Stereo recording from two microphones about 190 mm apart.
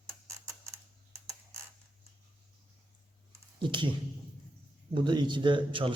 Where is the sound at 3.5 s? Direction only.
25° right (ahead or behind).